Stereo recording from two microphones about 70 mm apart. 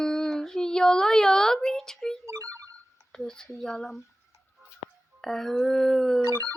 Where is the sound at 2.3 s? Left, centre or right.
Right.